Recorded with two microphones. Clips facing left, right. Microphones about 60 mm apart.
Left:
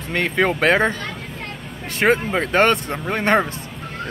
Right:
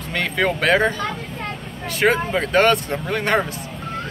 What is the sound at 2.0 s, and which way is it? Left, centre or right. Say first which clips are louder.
Speech: left 1 dB; left.